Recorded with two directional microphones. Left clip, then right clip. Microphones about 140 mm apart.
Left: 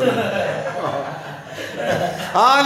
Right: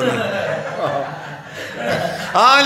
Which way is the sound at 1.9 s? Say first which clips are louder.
Right 1 dB; 5° left (ahead or behind).